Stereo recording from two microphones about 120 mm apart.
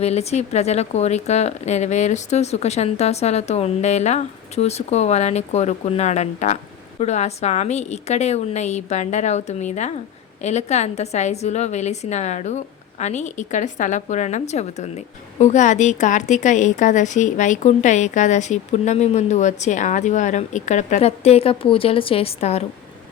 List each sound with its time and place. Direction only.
0.0 s a woman's voice: 60° left (ahead or behind)